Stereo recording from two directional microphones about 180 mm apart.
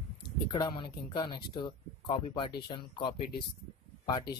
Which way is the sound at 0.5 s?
25° left (ahead or behind).